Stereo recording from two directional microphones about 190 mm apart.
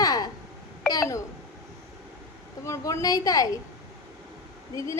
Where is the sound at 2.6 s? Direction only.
15° left (ahead or behind).